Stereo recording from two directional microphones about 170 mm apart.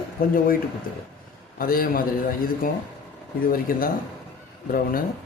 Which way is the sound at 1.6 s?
55° left (ahead or behind).